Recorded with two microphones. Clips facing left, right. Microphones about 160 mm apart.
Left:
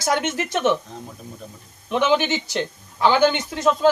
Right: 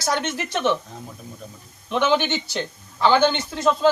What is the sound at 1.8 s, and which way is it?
Speech, 5° left (ahead or behind).